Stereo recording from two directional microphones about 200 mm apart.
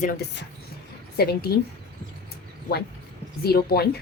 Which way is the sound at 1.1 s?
50° left (ahead or behind).